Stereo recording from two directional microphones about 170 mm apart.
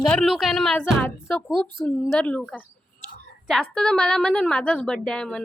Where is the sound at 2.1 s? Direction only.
5° left (ahead or behind).